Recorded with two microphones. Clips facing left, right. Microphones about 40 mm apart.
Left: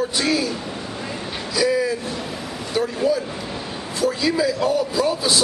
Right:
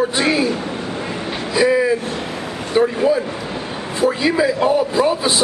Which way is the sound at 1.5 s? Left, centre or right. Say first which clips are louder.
Right 5 dB; right.